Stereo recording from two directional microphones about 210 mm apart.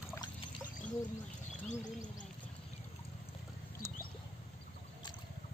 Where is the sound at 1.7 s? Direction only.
35° left (ahead or behind).